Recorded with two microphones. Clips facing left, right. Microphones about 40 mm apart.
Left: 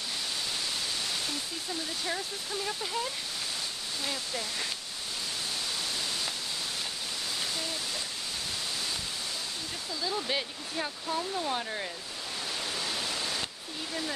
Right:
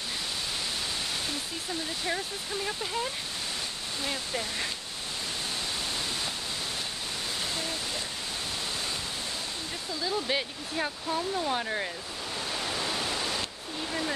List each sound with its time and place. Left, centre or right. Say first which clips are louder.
2.0 s speech: right 2 dB; centre
4.0 s speech: right 3 dB; right
10.0 s speech: right 2 dB; centre
12.6 s pink noise: right 3 dB; right